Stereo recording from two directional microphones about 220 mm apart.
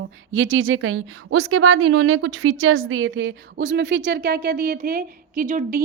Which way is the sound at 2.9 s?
65° right (ahead or behind).